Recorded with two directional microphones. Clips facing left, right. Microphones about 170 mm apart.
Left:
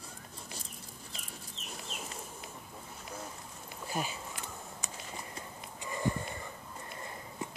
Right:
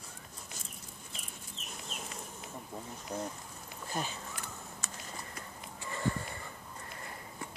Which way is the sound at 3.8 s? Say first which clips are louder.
Left 1 dB; 10° left (ahead or behind).